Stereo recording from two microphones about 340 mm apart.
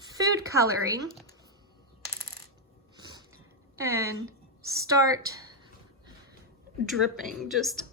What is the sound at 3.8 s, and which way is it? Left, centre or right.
A woman's voice, centre.